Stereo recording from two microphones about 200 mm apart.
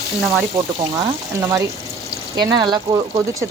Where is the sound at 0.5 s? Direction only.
20° right (ahead or behind).